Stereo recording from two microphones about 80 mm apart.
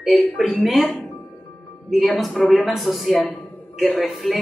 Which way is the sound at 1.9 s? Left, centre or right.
Centre.